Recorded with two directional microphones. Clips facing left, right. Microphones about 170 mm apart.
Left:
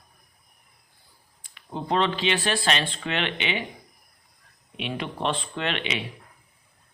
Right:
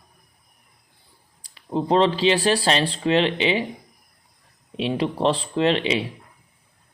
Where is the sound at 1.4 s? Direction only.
35° right (ahead or behind).